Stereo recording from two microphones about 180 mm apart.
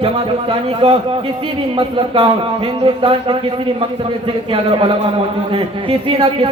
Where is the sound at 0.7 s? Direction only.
30° right (ahead or behind).